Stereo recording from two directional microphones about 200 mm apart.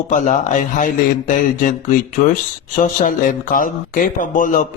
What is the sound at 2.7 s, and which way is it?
A man's voice, 40° left (ahead or behind).